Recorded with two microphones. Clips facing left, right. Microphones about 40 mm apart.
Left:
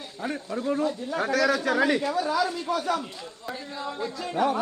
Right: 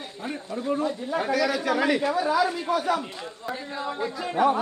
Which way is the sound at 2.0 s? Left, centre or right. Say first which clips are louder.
Right 2 dB; centre.